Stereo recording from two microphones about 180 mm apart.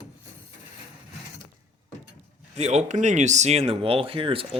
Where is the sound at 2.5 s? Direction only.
40° right (ahead or behind).